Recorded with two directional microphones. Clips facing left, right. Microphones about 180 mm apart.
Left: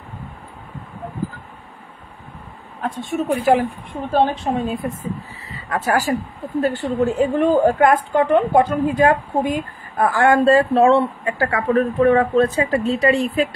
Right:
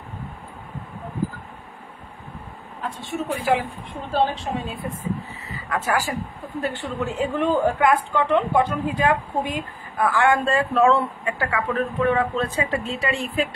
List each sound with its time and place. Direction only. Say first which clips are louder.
2.8 s a woman's voice: left 6 dB; 50° left (ahead or behind)
5.7 s a woman's voice: left 5 dB; 35° left (ahead or behind)